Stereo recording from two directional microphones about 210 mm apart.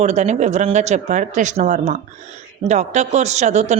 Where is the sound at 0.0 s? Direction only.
35° right (ahead or behind).